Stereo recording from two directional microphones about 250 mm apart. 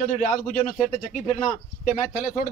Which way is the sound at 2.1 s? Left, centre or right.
Left.